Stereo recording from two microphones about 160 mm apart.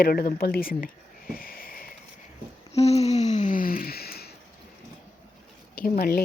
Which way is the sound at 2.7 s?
40° left (ahead or behind).